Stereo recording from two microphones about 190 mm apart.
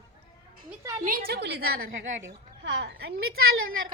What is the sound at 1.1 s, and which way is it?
Speech, 50° right (ahead or behind).